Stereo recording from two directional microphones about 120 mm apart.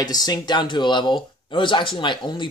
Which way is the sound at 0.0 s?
35° left (ahead or behind).